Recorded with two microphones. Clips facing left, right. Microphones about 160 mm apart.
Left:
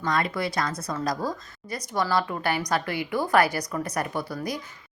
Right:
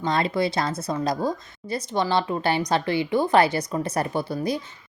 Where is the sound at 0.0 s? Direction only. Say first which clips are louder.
Right 4 dB; 25° right (ahead or behind).